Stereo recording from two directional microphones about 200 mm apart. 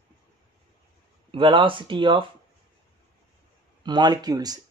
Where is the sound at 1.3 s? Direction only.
25° right (ahead or behind).